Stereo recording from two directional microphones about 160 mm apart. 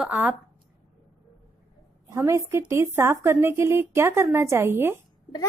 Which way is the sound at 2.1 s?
20° right (ahead or behind).